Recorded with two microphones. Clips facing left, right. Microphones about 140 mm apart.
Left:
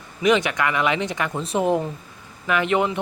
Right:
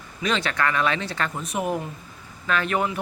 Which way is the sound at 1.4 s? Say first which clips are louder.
Left 9 dB; 30° left (ahead or behind).